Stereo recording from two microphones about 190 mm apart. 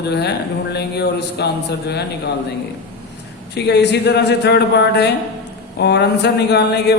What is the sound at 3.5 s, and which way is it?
Speech, 60° left (ahead or behind).